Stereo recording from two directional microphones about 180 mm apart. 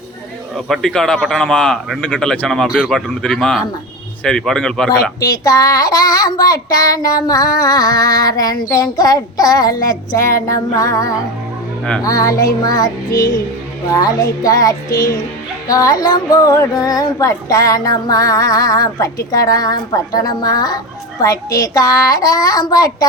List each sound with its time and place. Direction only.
0.5 s speech: centre (ahead or behind)
5.4 s child singing: 20° left (ahead or behind)
10.2 s music: 15° left (ahead or behind)
12.0 s child singing: 20° left (ahead or behind)